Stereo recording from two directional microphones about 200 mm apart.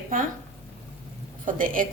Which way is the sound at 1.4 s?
40° right (ahead or behind).